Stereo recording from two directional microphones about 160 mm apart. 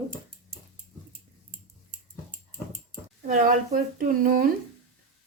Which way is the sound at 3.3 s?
55° right (ahead or behind).